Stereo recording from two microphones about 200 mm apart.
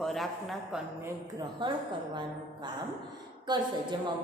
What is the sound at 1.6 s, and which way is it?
Speech, 20° right (ahead or behind).